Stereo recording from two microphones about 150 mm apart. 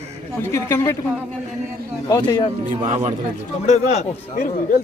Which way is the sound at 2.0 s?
25° left (ahead or behind).